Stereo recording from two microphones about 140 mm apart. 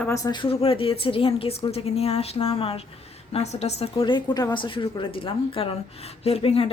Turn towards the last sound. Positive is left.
turn(degrees=45)  # may be behind; listen again after turning